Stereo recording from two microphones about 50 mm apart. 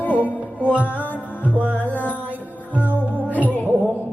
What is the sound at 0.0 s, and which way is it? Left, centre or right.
Music, left.